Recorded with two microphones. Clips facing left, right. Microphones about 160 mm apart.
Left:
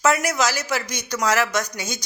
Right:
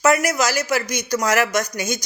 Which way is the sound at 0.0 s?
10° right (ahead or behind).